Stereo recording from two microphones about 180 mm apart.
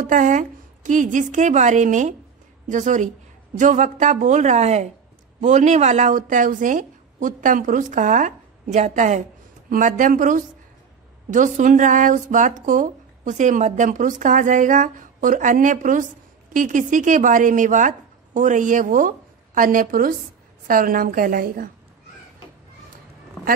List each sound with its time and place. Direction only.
0.0 s speech: 45° right (ahead or behind)